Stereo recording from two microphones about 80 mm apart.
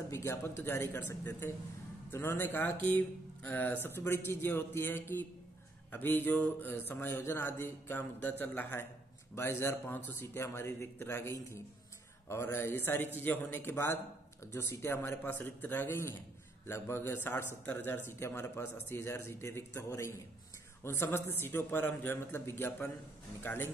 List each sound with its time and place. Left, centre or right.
0.1 s a man's voice: left
9.3 s a man's voice: left